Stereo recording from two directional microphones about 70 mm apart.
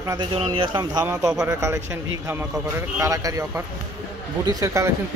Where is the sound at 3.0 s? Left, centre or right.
Right.